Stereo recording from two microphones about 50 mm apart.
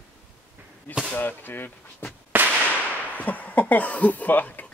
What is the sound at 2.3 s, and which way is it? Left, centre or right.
Firecracker, right.